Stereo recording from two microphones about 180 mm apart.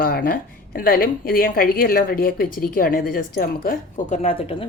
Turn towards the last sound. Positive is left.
turn(degrees=30)  # may be behind; listen again after turning